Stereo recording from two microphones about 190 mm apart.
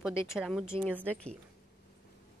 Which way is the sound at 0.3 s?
Centre (ahead or behind).